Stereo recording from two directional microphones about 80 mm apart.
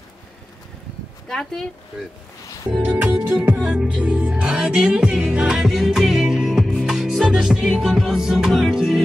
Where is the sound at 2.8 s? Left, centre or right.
Centre.